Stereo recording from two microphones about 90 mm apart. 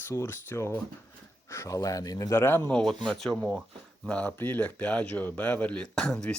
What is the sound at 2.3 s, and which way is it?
Speech, 30° left (ahead or behind).